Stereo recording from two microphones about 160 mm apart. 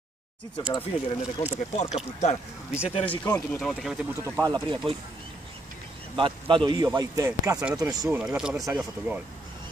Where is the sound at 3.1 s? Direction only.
15° left (ahead or behind).